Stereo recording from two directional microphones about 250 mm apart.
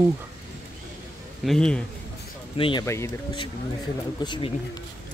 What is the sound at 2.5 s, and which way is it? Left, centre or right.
Speech, centre.